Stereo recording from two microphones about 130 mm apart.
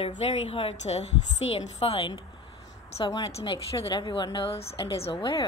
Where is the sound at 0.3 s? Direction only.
45° left (ahead or behind).